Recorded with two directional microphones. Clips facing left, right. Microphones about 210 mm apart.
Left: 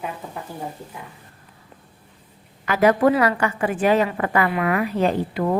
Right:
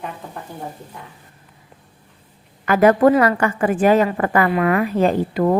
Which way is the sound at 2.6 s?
50° right (ahead or behind).